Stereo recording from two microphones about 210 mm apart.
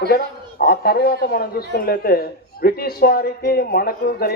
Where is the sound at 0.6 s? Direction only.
45° left (ahead or behind).